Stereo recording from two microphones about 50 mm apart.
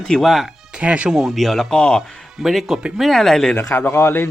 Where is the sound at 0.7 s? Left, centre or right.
Right.